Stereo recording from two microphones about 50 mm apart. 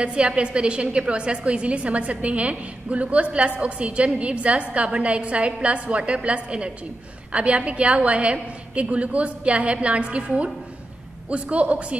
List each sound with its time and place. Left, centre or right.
0.0 s a woman's voice: right